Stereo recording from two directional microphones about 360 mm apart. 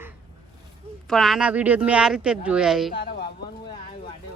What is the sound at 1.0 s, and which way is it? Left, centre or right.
Speech, centre.